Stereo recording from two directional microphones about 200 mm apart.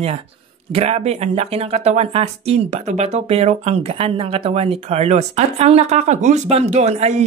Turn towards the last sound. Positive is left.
turn(degrees=-35)  # may be behind; listen again after turning